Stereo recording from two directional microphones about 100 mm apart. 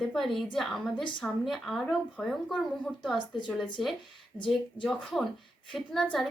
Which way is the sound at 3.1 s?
50° left (ahead or behind).